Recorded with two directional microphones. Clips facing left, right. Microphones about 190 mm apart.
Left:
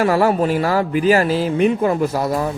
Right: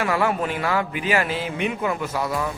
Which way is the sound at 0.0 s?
40° left (ahead or behind).